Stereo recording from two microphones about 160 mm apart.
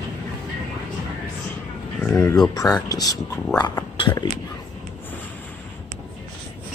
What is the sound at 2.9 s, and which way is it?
Speech, 25° left (ahead or behind).